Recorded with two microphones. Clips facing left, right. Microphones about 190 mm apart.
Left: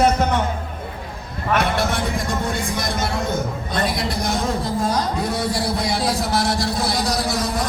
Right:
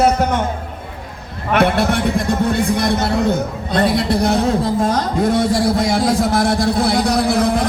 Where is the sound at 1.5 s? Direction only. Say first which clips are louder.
Right 5 dB; 60° right (ahead or behind).